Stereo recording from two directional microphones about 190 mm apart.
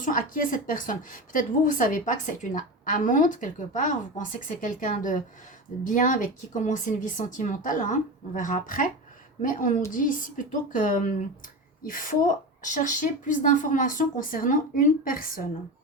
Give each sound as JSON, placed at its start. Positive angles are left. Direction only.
{"t": 0.0, "sound": "a woman's voice", "side_deg": 45}